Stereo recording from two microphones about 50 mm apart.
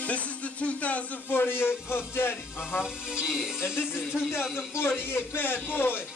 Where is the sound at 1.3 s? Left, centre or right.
Left.